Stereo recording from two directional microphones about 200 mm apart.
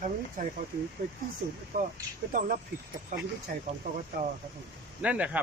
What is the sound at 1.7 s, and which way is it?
Speech, 40° right (ahead or behind).